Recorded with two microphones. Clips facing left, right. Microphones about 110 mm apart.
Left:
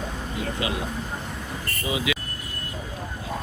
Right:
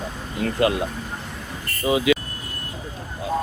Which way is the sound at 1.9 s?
40° right (ahead or behind).